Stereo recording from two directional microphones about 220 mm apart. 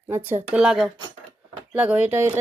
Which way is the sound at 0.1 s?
10° right (ahead or behind).